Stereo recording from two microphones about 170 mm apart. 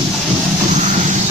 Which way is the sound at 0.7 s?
45° right (ahead or behind).